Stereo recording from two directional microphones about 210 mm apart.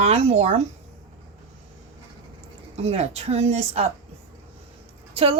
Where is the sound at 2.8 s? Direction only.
30° right (ahead or behind).